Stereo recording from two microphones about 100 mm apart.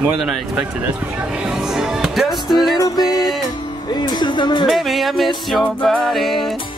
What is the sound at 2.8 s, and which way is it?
Music, 40° left (ahead or behind).